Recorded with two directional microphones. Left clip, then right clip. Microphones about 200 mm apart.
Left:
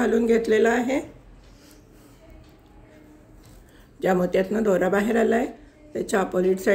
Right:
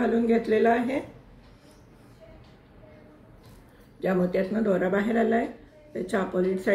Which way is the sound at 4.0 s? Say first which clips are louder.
Left 4 dB; 50° left (ahead or behind).